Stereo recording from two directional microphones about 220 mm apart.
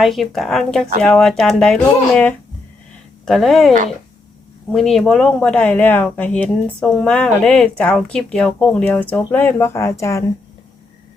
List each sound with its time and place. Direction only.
0.0 s speech: centre (ahead or behind)